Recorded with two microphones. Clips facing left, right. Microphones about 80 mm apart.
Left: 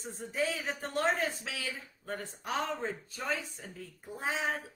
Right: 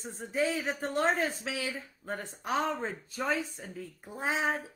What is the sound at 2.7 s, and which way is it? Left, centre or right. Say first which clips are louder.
Speech: right 2 dB; centre.